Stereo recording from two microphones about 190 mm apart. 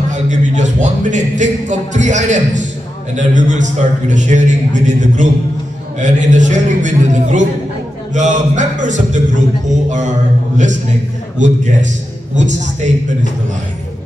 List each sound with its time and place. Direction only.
0.1 s a man's voice: 40° right (ahead or behind)
11.3 s a man's voice: 40° right (ahead or behind)